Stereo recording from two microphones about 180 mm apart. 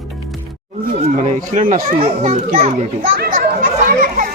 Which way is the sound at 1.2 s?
40° right (ahead or behind).